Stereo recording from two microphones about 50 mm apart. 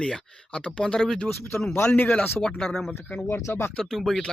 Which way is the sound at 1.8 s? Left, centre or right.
Left.